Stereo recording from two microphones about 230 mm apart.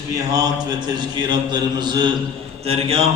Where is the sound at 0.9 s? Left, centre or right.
Centre.